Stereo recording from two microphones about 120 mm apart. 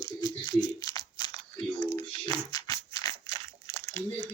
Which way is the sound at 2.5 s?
30° left (ahead or behind).